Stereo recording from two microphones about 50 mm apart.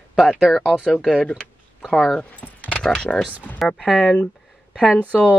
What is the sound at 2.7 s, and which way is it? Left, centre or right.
Speech, centre.